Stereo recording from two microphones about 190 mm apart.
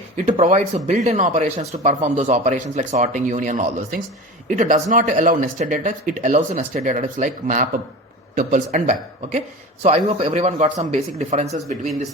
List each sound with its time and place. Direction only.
0.3 s speech: 40° right (ahead or behind)